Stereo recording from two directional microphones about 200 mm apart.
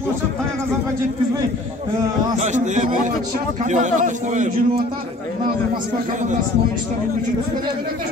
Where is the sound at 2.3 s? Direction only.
35° right (ahead or behind).